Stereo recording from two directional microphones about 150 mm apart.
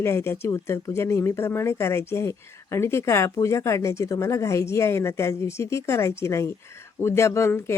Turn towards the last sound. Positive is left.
turn(degrees=15)  # may be behind; listen again after turning